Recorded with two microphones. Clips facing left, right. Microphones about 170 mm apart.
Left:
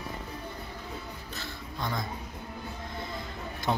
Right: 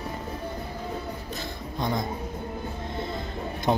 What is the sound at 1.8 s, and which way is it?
Speech, 20° right (ahead or behind).